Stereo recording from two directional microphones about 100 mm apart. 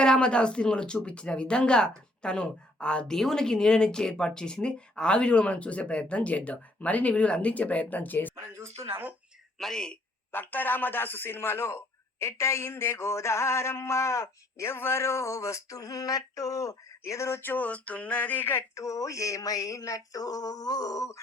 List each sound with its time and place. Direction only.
0.0 s a woman's voice: 10° left (ahead or behind)
8.8 s speech: 20° right (ahead or behind)
9.6 s speech: 5° left (ahead or behind)
10.3 s a sound: 20° left (ahead or behind); by 21.2 s 35° left (ahead or behind)